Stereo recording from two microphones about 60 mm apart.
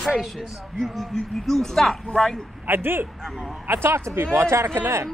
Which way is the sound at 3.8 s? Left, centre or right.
Right.